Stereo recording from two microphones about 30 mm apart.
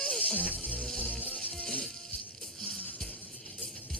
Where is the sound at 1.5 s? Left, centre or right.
Left.